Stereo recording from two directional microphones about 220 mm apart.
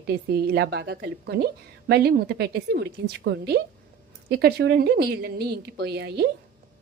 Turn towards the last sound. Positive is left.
turn(degrees=-50)  # may be behind; listen again after turning